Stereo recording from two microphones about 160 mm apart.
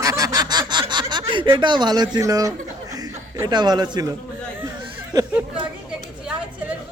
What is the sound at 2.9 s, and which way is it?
Chuckle, 25° right (ahead or behind).